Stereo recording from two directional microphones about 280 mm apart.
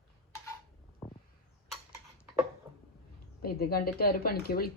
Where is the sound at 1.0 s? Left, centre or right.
Centre.